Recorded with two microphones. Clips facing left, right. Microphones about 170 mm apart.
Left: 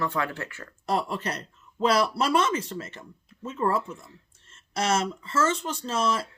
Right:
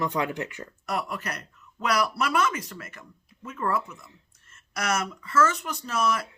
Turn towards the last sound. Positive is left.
turn(degrees=25)  # may be behind; listen again after turning